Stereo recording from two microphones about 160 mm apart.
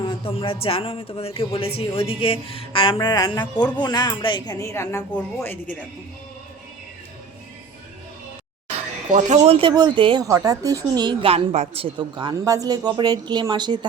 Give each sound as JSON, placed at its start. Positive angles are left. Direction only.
{"t": 0.0, "sound": "a woman's voice", "side_deg": 35}
{"t": 9.1, "sound": "speech", "side_deg": -45}